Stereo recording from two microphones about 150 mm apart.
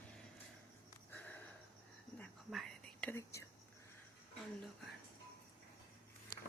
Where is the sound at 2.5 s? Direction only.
Centre (ahead or behind).